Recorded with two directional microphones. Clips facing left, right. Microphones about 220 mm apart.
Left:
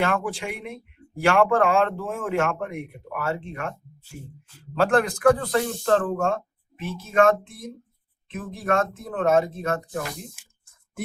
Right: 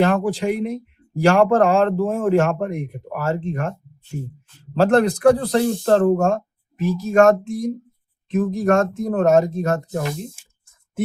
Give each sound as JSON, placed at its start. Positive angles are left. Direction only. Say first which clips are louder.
{"t": 0.0, "sound": "speech", "louder": "right 7 dB", "side_deg": -40}
{"t": 9.9, "sound": "speech", "louder": "right 6 dB", "side_deg": -25}